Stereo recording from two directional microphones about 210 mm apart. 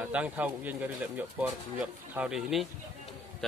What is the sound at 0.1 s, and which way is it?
A man's voice, 5° right (ahead or behind).